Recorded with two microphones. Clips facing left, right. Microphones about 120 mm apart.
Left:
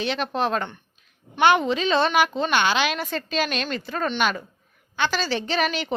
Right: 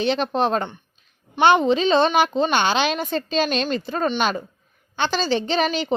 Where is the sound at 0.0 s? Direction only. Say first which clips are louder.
Right 4 dB; 30° right (ahead or behind).